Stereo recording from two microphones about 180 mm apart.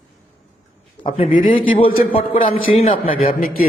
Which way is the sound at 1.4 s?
30° left (ahead or behind).